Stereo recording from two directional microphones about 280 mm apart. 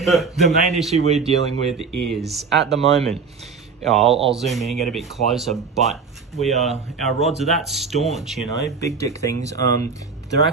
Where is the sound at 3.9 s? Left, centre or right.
Centre.